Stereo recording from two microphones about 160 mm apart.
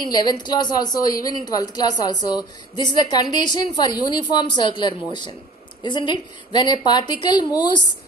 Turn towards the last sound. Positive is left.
turn(degrees=25)  # may be behind; listen again after turning